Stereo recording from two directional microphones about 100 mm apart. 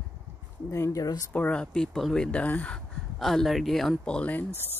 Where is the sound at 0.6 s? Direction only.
30° left (ahead or behind).